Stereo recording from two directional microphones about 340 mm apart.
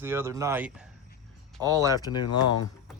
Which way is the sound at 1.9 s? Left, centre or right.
Centre.